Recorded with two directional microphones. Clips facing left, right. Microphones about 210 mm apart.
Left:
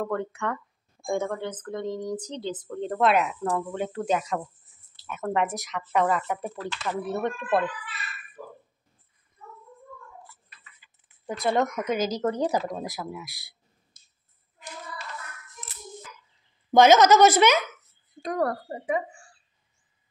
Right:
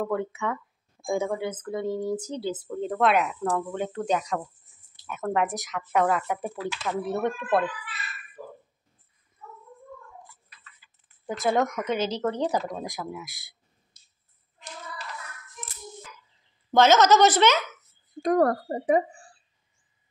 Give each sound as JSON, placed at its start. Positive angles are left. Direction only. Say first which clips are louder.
{"t": 0.0, "sound": "speech", "louder": "right 1 dB", "side_deg": -5}
{"t": 10.8, "sound": "keys jangling", "louder": "even", "side_deg": 20}
{"t": 11.2, "sound": "speech", "louder": "even", "side_deg": 0}
{"t": 12.0, "sound": "speech", "louder": "left 1 dB", "side_deg": 10}
{"t": 13.9, "sound": "clicking", "louder": "left 1 dB", "side_deg": 50}
{"t": 16.7, "sound": "speech", "louder": "left 2 dB", "side_deg": 10}
{"t": 18.2, "sound": "speech", "louder": "right 5 dB", "side_deg": -50}